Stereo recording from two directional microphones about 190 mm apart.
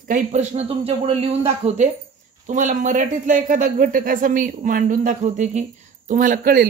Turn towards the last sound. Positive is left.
turn(degrees=-50)  # may be behind; listen again after turning